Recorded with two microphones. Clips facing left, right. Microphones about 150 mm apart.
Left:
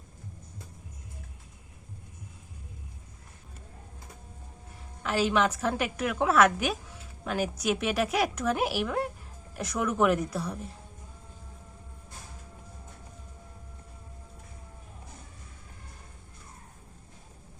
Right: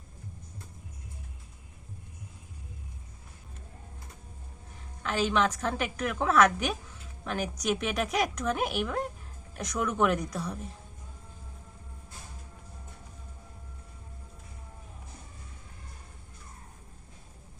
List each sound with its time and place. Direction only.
5.0 s a woman's voice: 5° left (ahead or behind)